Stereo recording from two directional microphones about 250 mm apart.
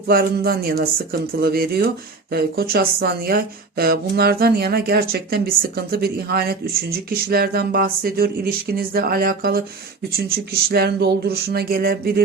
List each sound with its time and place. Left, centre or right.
0.1 s speech: right